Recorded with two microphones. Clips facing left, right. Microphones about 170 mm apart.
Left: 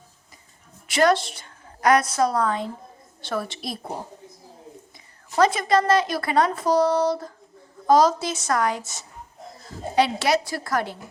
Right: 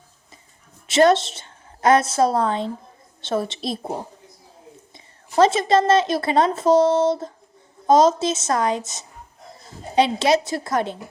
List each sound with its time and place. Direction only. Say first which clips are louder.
0.9 s a woman's voice: right 4 dB; 25° right (ahead or behind)
5.4 s a woman's voice: right 3 dB; 25° right (ahead or behind)